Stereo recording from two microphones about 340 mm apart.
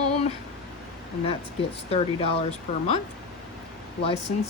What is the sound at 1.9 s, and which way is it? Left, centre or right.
Speech, centre.